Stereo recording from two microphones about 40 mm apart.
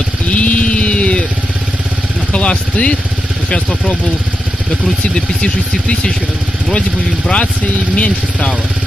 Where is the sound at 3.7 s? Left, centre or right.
Centre.